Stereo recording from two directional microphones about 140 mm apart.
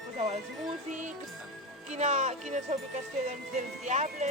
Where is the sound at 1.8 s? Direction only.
55° right (ahead or behind).